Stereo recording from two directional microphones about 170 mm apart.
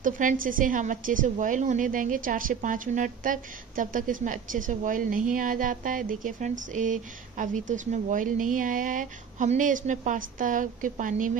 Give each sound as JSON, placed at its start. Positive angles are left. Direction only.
{"t": 0.0, "sound": "a woman's voice", "side_deg": -50}